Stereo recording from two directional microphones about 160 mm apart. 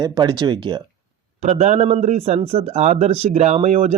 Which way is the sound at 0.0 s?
25° right (ahead or behind).